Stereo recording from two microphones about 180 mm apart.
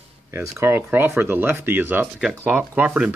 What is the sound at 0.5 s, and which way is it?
Speech, 10° right (ahead or behind).